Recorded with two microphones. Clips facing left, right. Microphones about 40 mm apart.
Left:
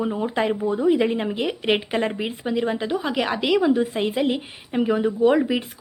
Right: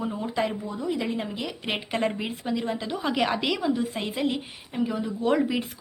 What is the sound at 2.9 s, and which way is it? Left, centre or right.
Speech, centre.